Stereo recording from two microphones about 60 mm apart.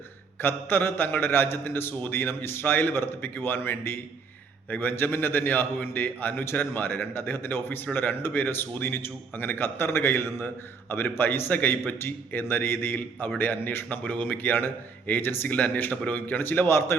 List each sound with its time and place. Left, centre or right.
0.4 s a man's voice: left